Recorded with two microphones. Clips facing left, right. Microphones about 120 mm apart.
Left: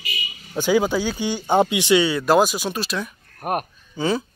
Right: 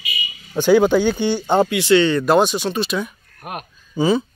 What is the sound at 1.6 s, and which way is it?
A man's voice, 20° left (ahead or behind).